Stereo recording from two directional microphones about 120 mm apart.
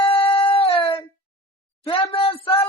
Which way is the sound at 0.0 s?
50° left (ahead or behind).